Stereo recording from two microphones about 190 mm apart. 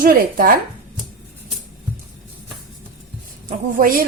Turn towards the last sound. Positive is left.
turn(degrees=-45)  # may be behind; listen again after turning